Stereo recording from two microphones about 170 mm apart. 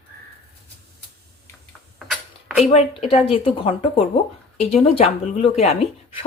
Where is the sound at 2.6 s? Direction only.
35° left (ahead or behind).